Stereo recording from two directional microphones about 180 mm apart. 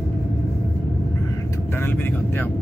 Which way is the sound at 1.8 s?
10° left (ahead or behind).